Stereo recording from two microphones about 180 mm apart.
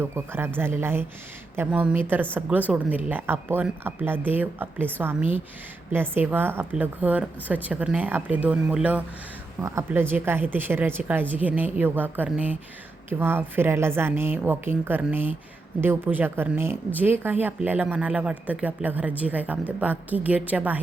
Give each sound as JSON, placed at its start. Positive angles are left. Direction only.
{"t": 0.0, "sound": "speech", "side_deg": -15}
{"t": 5.9, "sound": "speech", "side_deg": -10}